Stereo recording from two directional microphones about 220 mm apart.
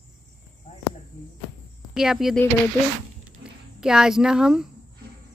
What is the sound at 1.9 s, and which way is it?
Speech, centre (ahead or behind).